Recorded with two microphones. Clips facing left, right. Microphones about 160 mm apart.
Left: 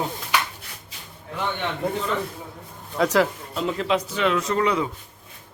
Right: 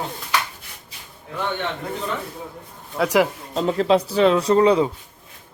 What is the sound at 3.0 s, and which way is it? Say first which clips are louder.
Speech: right 1 dB; 10° right (ahead or behind).